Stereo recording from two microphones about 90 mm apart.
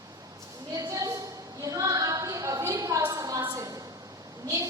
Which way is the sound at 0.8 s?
40° right (ahead or behind).